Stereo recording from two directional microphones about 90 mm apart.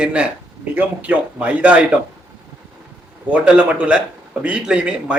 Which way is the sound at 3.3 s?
15° right (ahead or behind).